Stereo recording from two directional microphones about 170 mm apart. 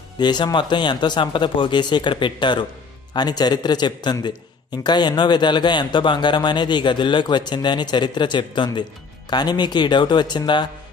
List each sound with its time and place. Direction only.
0.2 s a man's voice: 25° left (ahead or behind)